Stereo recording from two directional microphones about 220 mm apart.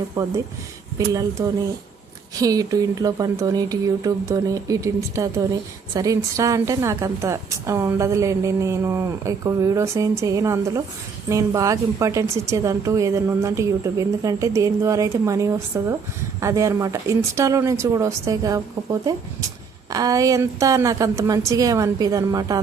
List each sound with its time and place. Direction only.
0.2 s a woman's voice: 15° right (ahead or behind)